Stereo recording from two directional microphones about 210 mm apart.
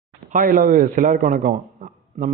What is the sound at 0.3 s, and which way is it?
A man's voice, 40° right (ahead or behind).